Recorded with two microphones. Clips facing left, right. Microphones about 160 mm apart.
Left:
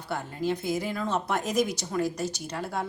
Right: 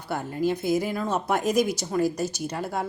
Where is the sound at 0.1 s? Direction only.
5° right (ahead or behind).